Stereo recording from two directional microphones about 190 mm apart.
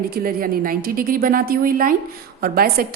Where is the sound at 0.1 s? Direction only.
50° right (ahead or behind).